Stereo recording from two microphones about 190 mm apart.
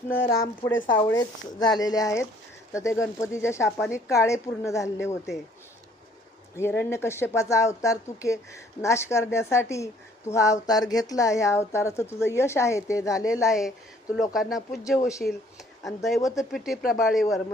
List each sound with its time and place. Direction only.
0.1 s speech: 15° left (ahead or behind)
6.5 s speech: 10° left (ahead or behind)
13.3 s speech: 5° right (ahead or behind)
15.0 s speech: 15° left (ahead or behind)
15.8 s speech: centre (ahead or behind)
16.2 s speech: 15° left (ahead or behind)
16.5 s speech: centre (ahead or behind)